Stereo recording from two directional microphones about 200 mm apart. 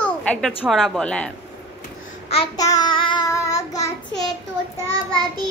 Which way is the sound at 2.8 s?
25° left (ahead or behind).